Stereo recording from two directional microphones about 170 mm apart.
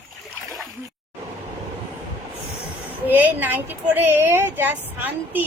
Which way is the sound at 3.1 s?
10° right (ahead or behind).